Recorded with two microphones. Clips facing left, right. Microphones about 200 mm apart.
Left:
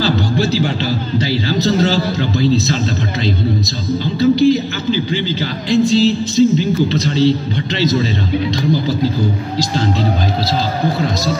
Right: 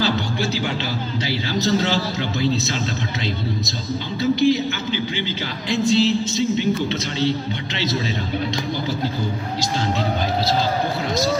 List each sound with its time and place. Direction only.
0.0 s music: 35° left (ahead or behind)
1.1 s speech: 35° left (ahead or behind)
4.2 s speech: 35° left (ahead or behind)